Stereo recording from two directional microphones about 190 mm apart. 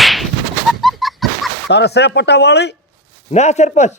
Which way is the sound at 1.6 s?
60° left (ahead or behind).